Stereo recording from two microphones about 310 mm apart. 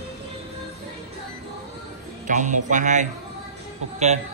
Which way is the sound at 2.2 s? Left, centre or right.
Right.